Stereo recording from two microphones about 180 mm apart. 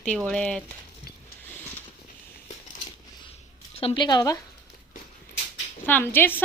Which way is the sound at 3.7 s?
30° left (ahead or behind).